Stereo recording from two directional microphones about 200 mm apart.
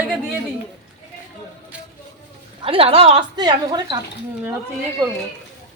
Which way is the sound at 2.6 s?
30° right (ahead or behind).